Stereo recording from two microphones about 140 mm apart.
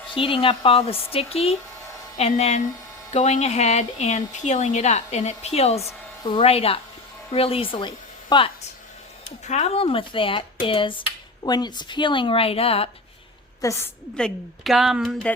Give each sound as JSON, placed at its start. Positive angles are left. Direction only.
{"t": 0.1, "sound": "speech", "side_deg": 40}
{"t": 9.5, "sound": "speech", "side_deg": 50}
{"t": 13.6, "sound": "a woman's voice", "side_deg": 20}
{"t": 14.2, "sound": "a woman's voice", "side_deg": 5}